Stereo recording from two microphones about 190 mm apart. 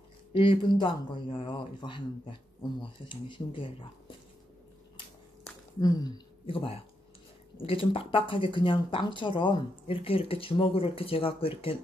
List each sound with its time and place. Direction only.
0.3 s speech: 25° left (ahead or behind)
5.8 s speech: 20° left (ahead or behind)